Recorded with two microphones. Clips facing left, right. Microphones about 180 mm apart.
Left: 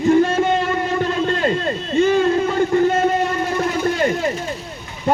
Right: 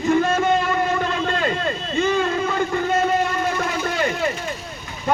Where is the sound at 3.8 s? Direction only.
40° left (ahead or behind).